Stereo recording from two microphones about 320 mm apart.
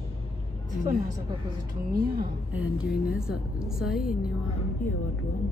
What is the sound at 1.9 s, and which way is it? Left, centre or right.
Speech, right.